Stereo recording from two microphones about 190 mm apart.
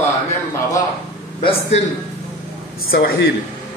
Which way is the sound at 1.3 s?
35° left (ahead or behind).